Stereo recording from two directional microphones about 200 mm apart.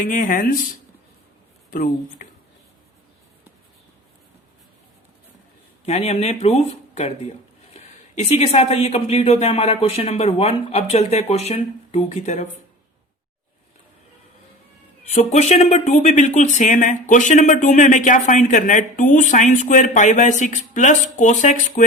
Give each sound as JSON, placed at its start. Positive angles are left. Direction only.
{"t": 0.0, "sound": "speech", "side_deg": 40}
{"t": 5.8, "sound": "speech", "side_deg": 35}
{"t": 15.0, "sound": "speech", "side_deg": 35}